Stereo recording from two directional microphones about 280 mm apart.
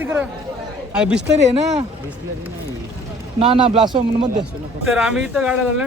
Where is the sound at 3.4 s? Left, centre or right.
Centre.